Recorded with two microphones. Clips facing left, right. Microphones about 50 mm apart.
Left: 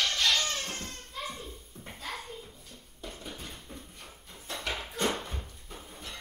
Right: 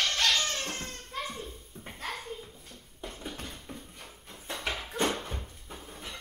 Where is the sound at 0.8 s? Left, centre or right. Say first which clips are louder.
Right 2 dB; centre.